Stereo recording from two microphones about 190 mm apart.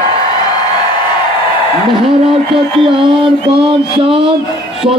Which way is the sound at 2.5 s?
25° right (ahead or behind).